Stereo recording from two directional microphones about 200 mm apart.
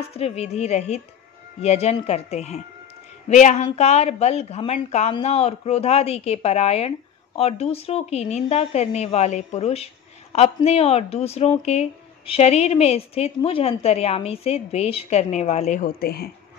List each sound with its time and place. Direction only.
0.0 s a woman's voice: 30° left (ahead or behind); by 16.3 s 50° left (ahead or behind)